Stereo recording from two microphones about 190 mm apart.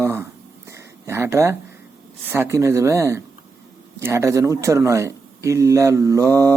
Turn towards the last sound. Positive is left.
turn(degrees=-15)  # may be behind; listen again after turning